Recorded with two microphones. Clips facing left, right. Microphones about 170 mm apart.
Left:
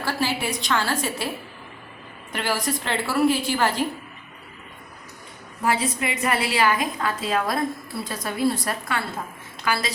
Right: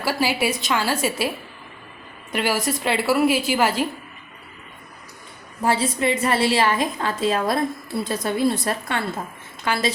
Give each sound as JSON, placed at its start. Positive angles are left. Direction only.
{"t": 0.0, "sound": "a sound", "side_deg": -10}
{"t": 0.4, "sound": "a woman's voice", "side_deg": -10}
{"t": 2.3, "sound": "a woman's voice", "side_deg": -10}
{"t": 5.6, "sound": "a woman's voice", "side_deg": -30}